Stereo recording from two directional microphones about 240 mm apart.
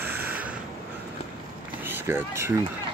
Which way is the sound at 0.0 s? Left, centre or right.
Centre.